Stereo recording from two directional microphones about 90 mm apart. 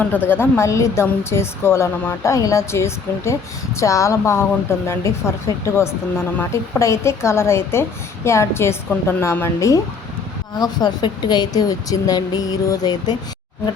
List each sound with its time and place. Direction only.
0.0 s a woman's voice: 20° left (ahead or behind); by 9.8 s 35° left (ahead or behind)
10.6 s a woman's voice: 50° left (ahead or behind)